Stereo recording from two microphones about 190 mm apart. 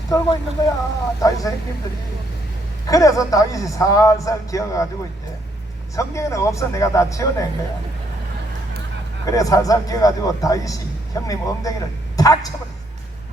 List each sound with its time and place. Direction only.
0.1 s a man's voice: 20° left (ahead or behind)
2.8 s a man's voice: 20° left (ahead or behind)
6.0 s a man's voice: 15° left (ahead or behind)
9.2 s a man's voice: 20° left (ahead or behind)